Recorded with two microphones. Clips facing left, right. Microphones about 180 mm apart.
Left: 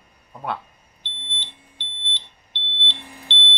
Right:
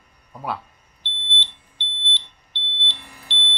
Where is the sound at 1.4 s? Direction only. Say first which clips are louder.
Right 3 dB; 15° left (ahead or behind).